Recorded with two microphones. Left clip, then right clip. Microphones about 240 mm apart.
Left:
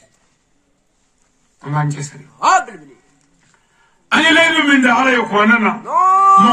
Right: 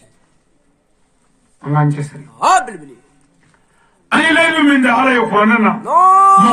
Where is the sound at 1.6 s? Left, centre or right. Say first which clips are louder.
Right 4 dB; left.